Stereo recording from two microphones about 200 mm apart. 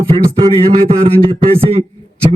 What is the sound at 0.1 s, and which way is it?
A man's voice, 30° right (ahead or behind).